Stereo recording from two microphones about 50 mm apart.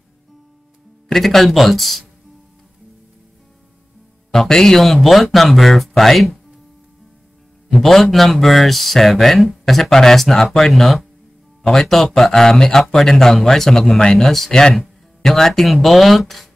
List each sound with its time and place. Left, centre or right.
1.0 s speech: centre
4.3 s speech: centre
7.7 s speech: centre